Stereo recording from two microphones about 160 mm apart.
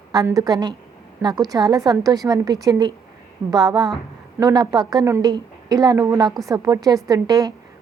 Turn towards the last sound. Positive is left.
turn(degrees=-25)  # may be behind; listen again after turning